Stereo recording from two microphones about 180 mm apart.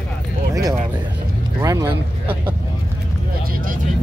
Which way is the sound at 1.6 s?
20° right (ahead or behind).